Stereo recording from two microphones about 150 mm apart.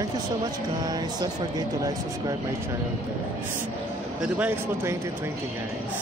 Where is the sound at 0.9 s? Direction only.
25° right (ahead or behind).